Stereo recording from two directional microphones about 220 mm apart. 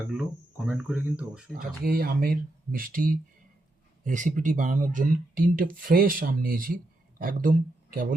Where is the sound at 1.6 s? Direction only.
40° right (ahead or behind).